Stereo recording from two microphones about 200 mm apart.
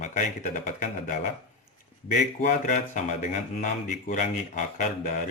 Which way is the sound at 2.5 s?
40° left (ahead or behind).